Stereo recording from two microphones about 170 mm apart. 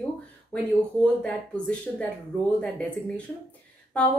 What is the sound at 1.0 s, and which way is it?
A woman's voice, 10° left (ahead or behind).